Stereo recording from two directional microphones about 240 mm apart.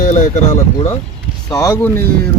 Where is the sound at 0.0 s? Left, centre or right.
Left.